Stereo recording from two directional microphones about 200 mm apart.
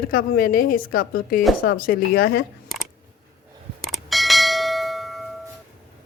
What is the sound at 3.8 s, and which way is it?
Bell, centre (ahead or behind).